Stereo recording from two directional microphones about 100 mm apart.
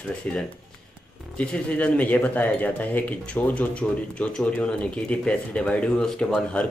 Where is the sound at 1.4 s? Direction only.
10° left (ahead or behind).